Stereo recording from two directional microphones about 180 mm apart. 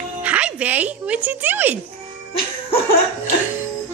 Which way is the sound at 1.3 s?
10° right (ahead or behind).